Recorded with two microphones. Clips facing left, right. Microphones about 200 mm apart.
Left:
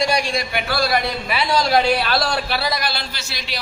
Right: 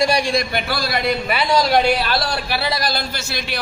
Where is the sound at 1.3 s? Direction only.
Centre (ahead or behind).